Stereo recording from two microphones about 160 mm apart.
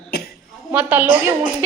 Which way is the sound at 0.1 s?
75° left (ahead or behind).